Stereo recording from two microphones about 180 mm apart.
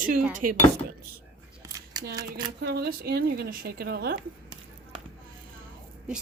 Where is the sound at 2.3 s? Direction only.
65° right (ahead or behind).